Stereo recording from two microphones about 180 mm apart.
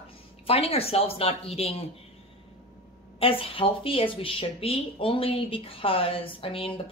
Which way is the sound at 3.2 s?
30° left (ahead or behind).